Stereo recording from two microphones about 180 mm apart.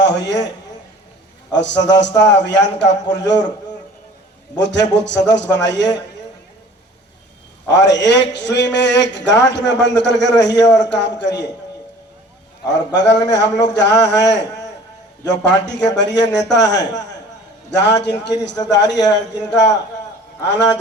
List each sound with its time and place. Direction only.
0.0 s a man's voice: 75° left (ahead or behind)
1.5 s a man's voice: 75° left (ahead or behind)
4.5 s a man's voice: 75° left (ahead or behind)
7.7 s a man's voice: 75° left (ahead or behind)
12.6 s a man's voice: 75° left (ahead or behind)